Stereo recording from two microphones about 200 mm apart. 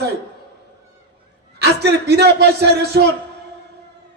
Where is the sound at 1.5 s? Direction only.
55° right (ahead or behind).